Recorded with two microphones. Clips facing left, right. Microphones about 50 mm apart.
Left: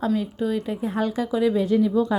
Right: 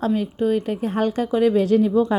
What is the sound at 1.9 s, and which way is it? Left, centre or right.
Speech, right.